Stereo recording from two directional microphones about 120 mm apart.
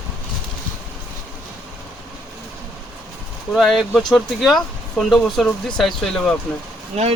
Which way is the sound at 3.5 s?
Centre (ahead or behind).